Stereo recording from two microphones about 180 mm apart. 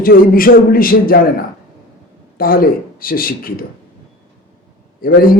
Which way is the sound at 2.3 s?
55° left (ahead or behind).